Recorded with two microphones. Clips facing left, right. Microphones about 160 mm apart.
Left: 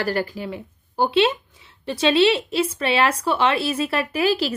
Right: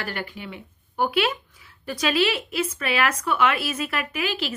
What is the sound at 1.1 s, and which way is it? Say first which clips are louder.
Speech: left 6 dB; 25° left (ahead or behind).